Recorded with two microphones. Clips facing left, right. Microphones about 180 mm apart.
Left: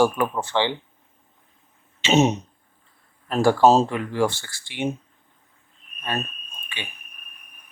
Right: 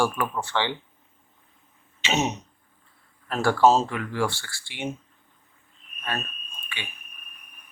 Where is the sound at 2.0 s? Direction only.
25° left (ahead or behind).